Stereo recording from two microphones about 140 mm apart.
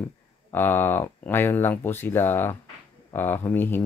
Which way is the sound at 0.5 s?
15° left (ahead or behind).